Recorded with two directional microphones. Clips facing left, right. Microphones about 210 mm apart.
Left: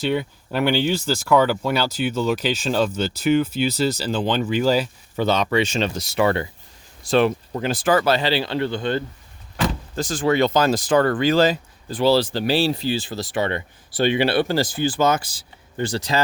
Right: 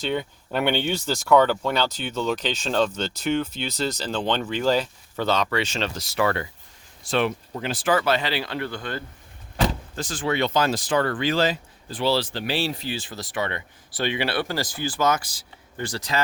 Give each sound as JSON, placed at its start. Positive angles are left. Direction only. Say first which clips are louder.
{"t": 0.0, "sound": "speech", "louder": "left 4 dB", "side_deg": 5}
{"t": 5.2, "sound": "speech", "louder": "left 4 dB", "side_deg": 20}
{"t": 7.1, "sound": "speech", "louder": "left 6 dB", "side_deg": 35}
{"t": 9.9, "sound": "speech", "louder": "left 6 dB", "side_deg": 40}